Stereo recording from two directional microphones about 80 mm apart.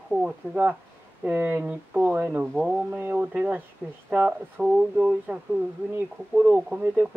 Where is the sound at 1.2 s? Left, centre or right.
Right.